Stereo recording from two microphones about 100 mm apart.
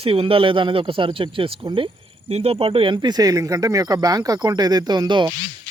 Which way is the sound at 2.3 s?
90° right.